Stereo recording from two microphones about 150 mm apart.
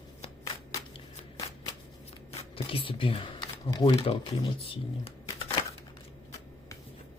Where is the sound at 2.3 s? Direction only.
35° left (ahead or behind).